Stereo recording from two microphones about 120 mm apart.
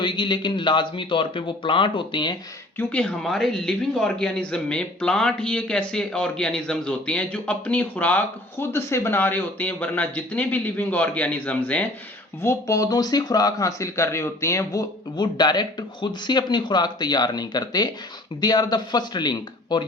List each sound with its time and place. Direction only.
0.0 s speech: 40° left (ahead or behind)
2.7 s speech: 10° left (ahead or behind)
12.4 s speech: 25° left (ahead or behind)